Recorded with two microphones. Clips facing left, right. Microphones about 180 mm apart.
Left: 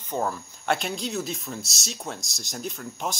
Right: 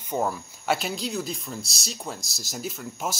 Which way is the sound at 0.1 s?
10° right (ahead or behind).